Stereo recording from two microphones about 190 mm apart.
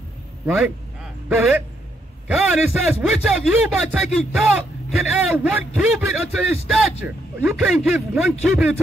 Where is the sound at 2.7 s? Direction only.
Centre (ahead or behind).